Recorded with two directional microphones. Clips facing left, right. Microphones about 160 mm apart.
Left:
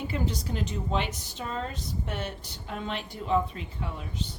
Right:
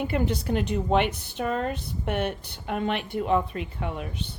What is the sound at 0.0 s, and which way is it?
A woman's voice, 60° right (ahead or behind).